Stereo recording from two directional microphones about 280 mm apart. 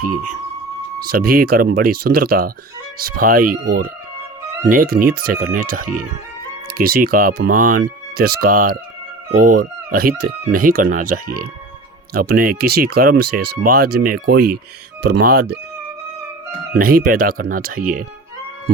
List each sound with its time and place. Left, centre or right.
0.0 s speech: right
12.4 s speech: right
16.7 s speech: right